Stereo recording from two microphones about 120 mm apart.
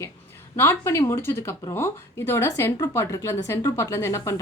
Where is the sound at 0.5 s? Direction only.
20° left (ahead or behind).